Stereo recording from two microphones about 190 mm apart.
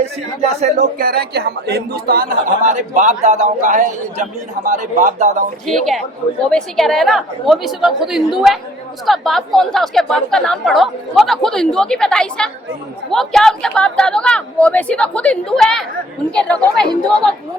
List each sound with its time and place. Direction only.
0.0 s a man's voice: 35° right (ahead or behind)
0.9 s a man's voice: 50° right (ahead or behind)
2.6 s a man's voice: 40° right (ahead or behind)
5.6 s speech: centre (ahead or behind)